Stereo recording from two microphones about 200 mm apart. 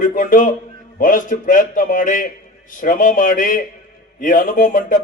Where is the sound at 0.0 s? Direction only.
40° left (ahead or behind).